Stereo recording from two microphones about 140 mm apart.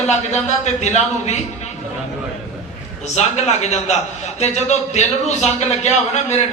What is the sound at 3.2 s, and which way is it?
A man's voice, 50° left (ahead or behind).